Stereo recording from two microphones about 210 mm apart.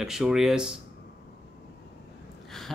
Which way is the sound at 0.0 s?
5° right (ahead or behind).